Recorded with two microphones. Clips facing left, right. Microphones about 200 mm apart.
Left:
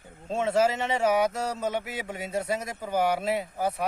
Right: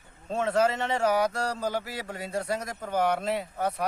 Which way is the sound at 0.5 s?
5° left (ahead or behind).